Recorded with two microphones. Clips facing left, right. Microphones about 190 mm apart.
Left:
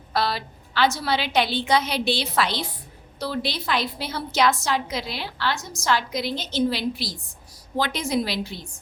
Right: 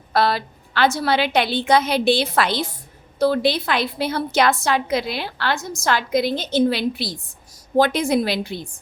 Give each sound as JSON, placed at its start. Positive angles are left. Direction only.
{"t": 0.1, "sound": "a woman's voice", "side_deg": -55}